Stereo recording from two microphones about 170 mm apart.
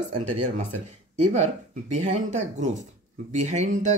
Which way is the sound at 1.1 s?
40° right (ahead or behind).